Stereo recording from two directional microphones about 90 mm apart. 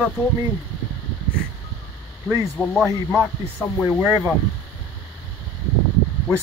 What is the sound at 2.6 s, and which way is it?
Speech, 15° right (ahead or behind).